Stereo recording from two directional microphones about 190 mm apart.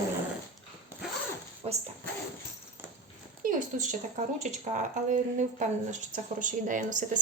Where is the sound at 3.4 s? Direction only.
45° right (ahead or behind).